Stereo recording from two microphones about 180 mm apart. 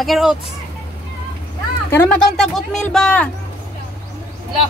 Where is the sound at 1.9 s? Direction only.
15° left (ahead or behind).